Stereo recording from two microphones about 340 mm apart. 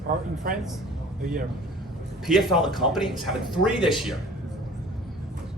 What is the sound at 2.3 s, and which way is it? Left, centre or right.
Speech, centre.